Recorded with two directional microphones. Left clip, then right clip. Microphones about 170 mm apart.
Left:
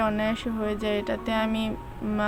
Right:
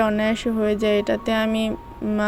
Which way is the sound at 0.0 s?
30° right (ahead or behind).